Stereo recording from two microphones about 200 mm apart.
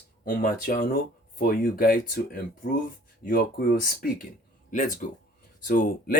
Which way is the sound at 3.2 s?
45° left (ahead or behind).